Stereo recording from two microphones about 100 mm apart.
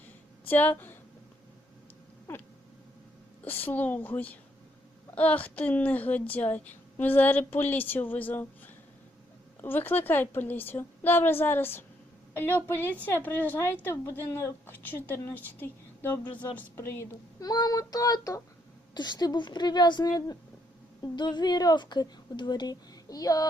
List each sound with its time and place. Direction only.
0.4 s a woman's voice: 15° left (ahead or behind)
3.4 s a woman's voice: 20° left (ahead or behind)
17.4 s child singing: 40° left (ahead or behind)
18.9 s a woman's voice: 45° left (ahead or behind)